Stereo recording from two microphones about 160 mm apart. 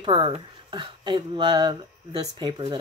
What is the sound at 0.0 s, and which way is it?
Speech, 30° right (ahead or behind).